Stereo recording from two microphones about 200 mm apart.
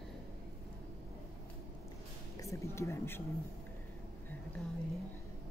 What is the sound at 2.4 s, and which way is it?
Speech, 15° left (ahead or behind).